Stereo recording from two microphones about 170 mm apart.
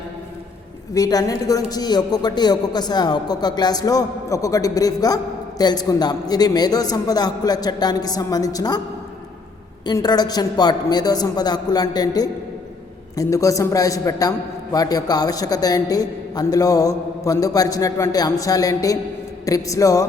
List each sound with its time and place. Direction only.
0.9 s speech: 20° left (ahead or behind)
9.8 s speech: 25° left (ahead or behind)